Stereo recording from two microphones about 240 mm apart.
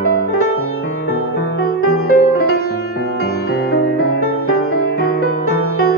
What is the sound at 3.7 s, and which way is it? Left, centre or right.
Music, left.